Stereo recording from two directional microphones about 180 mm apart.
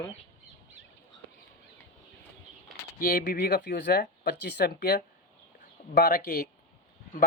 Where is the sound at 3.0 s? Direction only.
55° left (ahead or behind).